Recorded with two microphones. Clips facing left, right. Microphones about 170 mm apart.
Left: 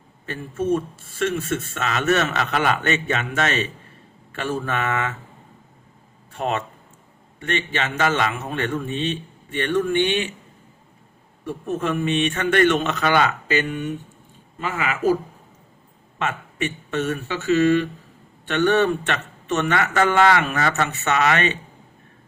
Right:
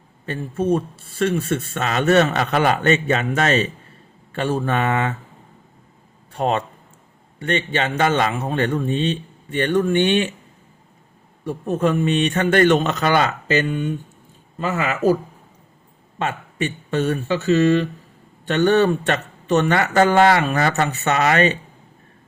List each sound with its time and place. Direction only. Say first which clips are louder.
0.3 s speech: right 2 dB; 35° right (ahead or behind)
6.3 s speech: right 4 dB; 35° right (ahead or behind)
11.4 s speech: right 4 dB; 35° right (ahead or behind)
16.1 s speech: right 2 dB; 35° right (ahead or behind)